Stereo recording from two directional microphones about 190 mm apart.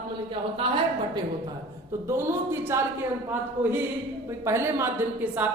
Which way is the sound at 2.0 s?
15° right (ahead or behind).